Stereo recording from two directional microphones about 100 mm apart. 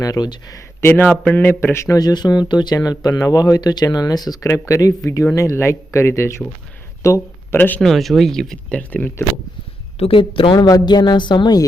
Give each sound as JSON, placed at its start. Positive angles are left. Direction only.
{"t": 0.0, "sound": "speech", "side_deg": 40}
{"t": 0.8, "sound": "speech", "side_deg": 20}
{"t": 2.0, "sound": "speech", "side_deg": 45}
{"t": 4.4, "sound": "speech", "side_deg": 30}
{"t": 7.0, "sound": "a sound", "side_deg": 30}
{"t": 7.8, "sound": "speech", "side_deg": 0}
{"t": 8.9, "sound": "speech", "side_deg": 15}
{"t": 10.0, "sound": "speech", "side_deg": 65}